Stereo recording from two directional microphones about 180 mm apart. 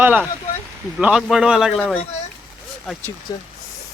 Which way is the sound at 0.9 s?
5° right (ahead or behind).